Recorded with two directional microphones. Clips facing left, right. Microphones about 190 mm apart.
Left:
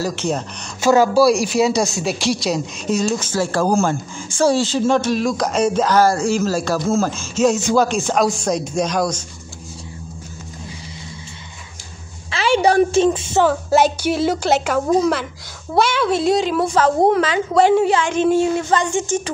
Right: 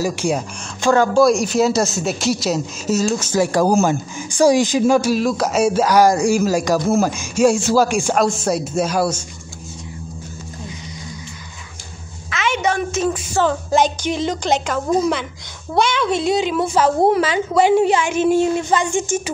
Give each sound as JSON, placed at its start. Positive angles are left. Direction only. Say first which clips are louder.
{"t": 0.0, "sound": "speech", "louder": "right 2 dB", "side_deg": -10}
{"t": 0.7, "sound": "speech", "louder": "left 1 dB", "side_deg": 5}
{"t": 12.3, "sound": "a sound", "louder": "left 4 dB", "side_deg": 35}
{"t": 13.4, "sound": "a child's voice", "louder": "left 1 dB", "side_deg": 5}